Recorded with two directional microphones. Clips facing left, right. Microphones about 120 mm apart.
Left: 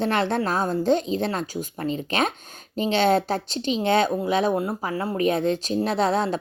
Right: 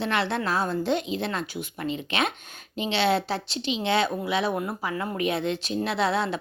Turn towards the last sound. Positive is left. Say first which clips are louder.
# left 3 dB
turn(degrees=40)  # may be behind; listen again after turning